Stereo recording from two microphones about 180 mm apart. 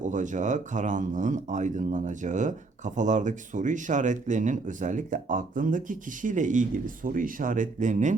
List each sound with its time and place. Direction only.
0.0 s speech: 45° right (ahead or behind)